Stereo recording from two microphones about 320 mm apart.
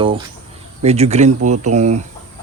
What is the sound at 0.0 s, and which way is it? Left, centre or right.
Speech, centre.